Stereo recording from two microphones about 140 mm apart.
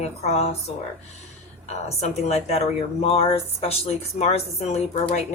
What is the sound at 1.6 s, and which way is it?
Speech, 50° left (ahead or behind).